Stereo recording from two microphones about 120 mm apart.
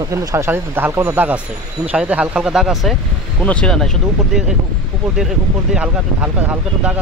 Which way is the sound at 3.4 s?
10° left (ahead or behind).